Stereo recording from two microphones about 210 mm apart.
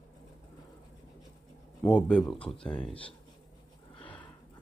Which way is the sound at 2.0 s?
5° left (ahead or behind).